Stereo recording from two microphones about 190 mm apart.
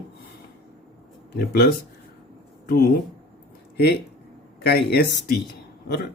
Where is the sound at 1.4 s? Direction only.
55° left (ahead or behind).